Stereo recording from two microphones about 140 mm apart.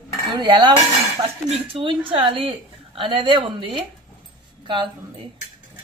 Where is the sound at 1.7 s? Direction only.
40° right (ahead or behind).